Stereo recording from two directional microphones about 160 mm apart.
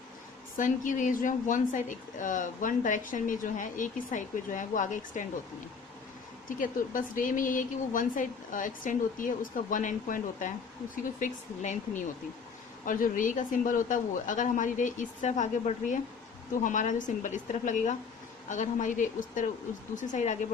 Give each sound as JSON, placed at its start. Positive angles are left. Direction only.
{"t": 0.5, "sound": "a woman's voice", "side_deg": 55}
{"t": 6.6, "sound": "a woman's voice", "side_deg": 55}